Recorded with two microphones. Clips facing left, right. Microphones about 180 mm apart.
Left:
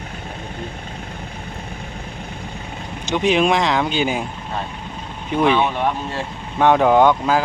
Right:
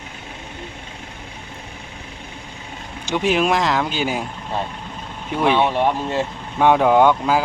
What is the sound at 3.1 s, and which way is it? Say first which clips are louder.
Speech: left 2 dB; 5° right (ahead or behind).